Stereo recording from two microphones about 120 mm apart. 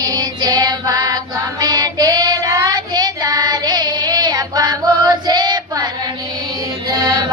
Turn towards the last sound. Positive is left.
turn(degrees=-30)  # may be behind; listen again after turning